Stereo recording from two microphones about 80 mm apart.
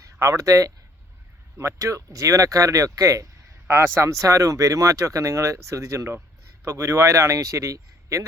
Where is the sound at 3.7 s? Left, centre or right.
Right.